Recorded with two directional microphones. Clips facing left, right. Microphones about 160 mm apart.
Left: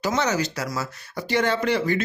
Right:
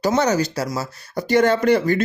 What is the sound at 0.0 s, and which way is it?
Speech, 40° right (ahead or behind).